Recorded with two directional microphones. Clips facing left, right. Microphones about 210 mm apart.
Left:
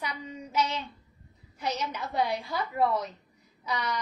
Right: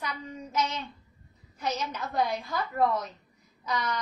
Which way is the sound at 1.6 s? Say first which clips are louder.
Even; 15° left (ahead or behind).